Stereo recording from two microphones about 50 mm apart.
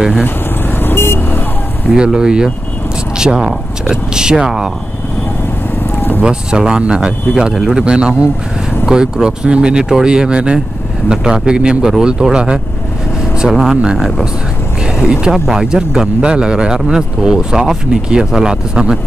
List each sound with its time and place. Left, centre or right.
0.7 s vehicle: left
2.0 s speech: centre
5.9 s a sound: left
6.2 s speech: centre
15.0 s speech: centre